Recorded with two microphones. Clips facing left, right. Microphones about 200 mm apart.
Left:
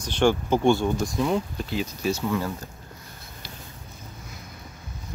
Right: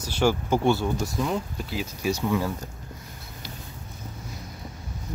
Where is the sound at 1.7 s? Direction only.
10° right (ahead or behind).